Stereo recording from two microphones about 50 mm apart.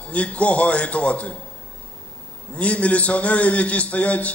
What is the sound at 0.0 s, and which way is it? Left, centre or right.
A man's voice, left.